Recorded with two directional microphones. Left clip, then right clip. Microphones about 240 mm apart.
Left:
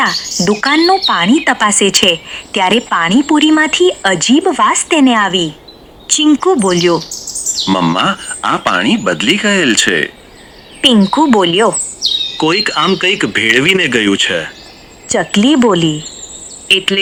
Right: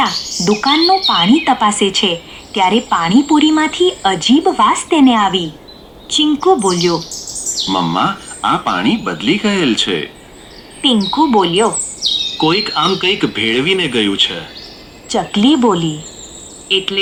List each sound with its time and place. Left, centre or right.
0.0 s speech: left
12.0 s bird: centre
12.4 s speech: left